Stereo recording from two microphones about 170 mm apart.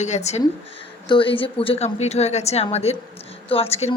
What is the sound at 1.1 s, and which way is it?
Speech, 30° left (ahead or behind).